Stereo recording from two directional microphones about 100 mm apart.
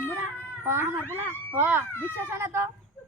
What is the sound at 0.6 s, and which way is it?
A woman's voice, 25° right (ahead or behind).